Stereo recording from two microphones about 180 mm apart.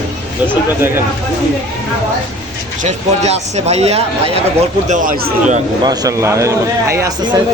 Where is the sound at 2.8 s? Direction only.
40° right (ahead or behind).